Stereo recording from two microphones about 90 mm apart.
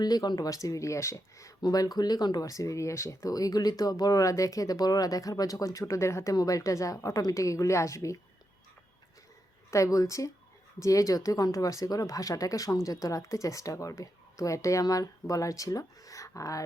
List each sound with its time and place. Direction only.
0.0 s speech: 45° left (ahead or behind)
9.6 s speech: 35° left (ahead or behind)